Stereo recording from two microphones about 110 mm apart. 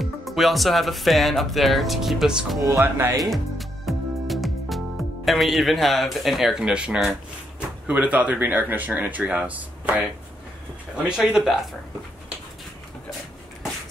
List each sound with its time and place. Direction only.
0.0 s speech: centre (ahead or behind)
2.6 s speech: 25° right (ahead or behind)
3.2 s music: centre (ahead or behind)
7.8 s speech: 15° right (ahead or behind)